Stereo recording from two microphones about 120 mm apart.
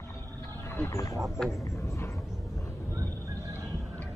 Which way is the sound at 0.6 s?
25° left (ahead or behind).